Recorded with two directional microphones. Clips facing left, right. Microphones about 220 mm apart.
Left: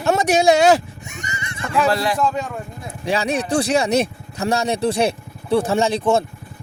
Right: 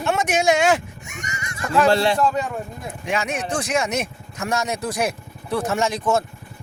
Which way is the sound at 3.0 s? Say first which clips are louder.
Left 5 dB; 35° left (ahead or behind).